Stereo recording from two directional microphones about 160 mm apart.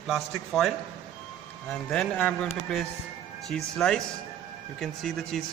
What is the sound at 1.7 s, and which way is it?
Speech, 10° left (ahead or behind).